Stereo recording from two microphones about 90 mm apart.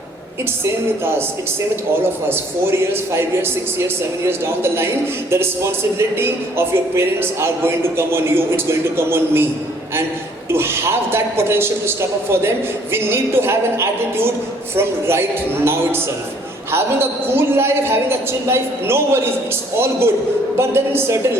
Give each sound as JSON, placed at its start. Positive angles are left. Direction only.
{"t": 2.3, "sound": "a man's voice", "side_deg": -30}
{"t": 10.5, "sound": "a man's voice", "side_deg": -30}